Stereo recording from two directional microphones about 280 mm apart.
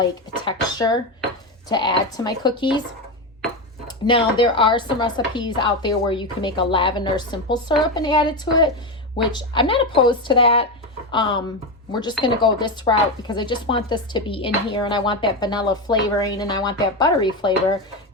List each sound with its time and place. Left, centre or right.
0.0 s speech: centre
3.8 s speech: centre